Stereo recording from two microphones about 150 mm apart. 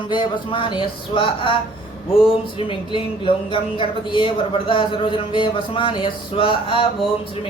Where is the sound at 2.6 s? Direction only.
35° left (ahead or behind).